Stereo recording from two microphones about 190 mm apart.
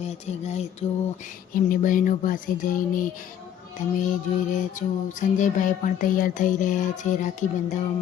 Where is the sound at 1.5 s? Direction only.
45° left (ahead or behind).